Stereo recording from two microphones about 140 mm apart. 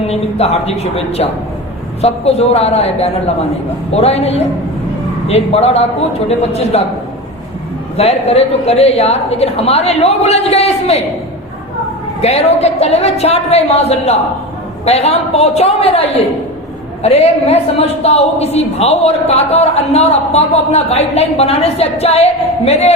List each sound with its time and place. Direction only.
0.1 s a woman's voice: 50° left (ahead or behind)
7.9 s a woman's voice: 50° left (ahead or behind)
12.2 s a woman's voice: 50° left (ahead or behind)